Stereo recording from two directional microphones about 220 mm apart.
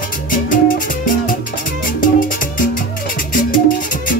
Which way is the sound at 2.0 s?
40° left (ahead or behind).